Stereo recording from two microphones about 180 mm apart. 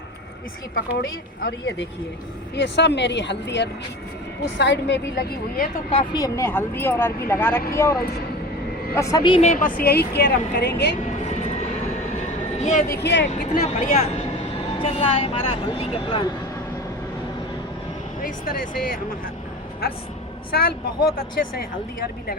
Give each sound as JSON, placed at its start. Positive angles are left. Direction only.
{"t": 1.4, "sound": "a woman's voice", "side_deg": 65}
{"t": 5.9, "sound": "speech", "side_deg": 25}
{"t": 9.0, "sound": "speech", "side_deg": 20}
{"t": 9.4, "sound": "a woman's voice", "side_deg": 45}
{"t": 12.1, "sound": "a sound", "side_deg": 40}
{"t": 12.9, "sound": "speech", "side_deg": 70}
{"t": 13.5, "sound": "speech", "side_deg": 40}
{"t": 18.2, "sound": "speech", "side_deg": 55}
{"t": 20.5, "sound": "a woman's voice", "side_deg": 60}